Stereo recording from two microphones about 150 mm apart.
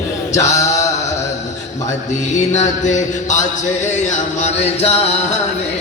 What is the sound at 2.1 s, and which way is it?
Mantra, 50° left (ahead or behind).